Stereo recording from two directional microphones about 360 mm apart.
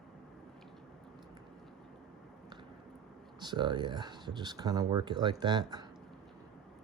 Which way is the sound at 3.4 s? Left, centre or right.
Centre.